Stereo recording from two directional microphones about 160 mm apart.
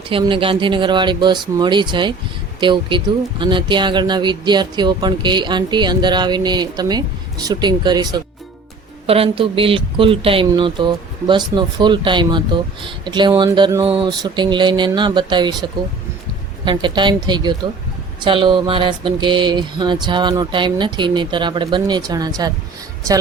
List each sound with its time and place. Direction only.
0.1 s speech: 35° right (ahead or behind)
9.0 s speech: 35° right (ahead or behind)